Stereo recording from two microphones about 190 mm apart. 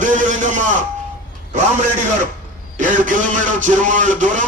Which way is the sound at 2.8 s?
40° right (ahead or behind).